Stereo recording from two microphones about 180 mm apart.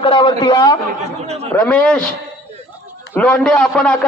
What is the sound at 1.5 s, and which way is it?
Speech, 10° left (ahead or behind).